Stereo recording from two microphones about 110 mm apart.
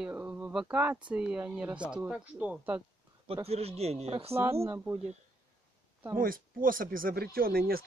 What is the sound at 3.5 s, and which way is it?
Speech, 70° right (ahead or behind).